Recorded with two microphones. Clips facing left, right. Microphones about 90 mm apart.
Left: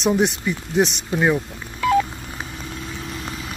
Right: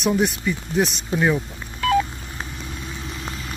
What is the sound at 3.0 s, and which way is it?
Vehicle, centre (ahead or behind).